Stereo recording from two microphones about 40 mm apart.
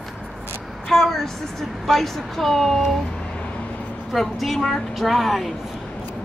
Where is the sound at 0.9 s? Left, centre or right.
Centre.